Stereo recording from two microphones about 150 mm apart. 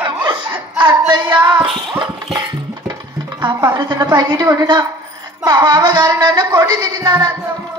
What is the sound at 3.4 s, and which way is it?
Music, 30° right (ahead or behind).